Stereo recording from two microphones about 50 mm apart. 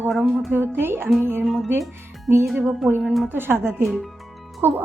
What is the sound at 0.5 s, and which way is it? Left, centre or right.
Speech, right.